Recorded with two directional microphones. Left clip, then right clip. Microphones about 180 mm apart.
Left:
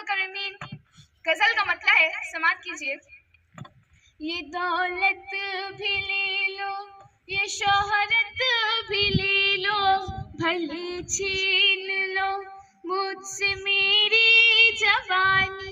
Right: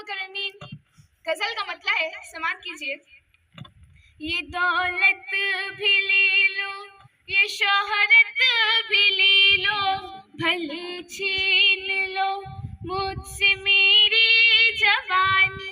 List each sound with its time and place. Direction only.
0.0 s a sound: 40° right (ahead or behind)
1.2 s a woman's voice: 40° right (ahead or behind)
4.2 s a woman's voice: 30° right (ahead or behind)
4.5 s female singing: 30° right (ahead or behind)
11.8 s female singing: 55° right (ahead or behind)
13.7 s female singing: 35° right (ahead or behind)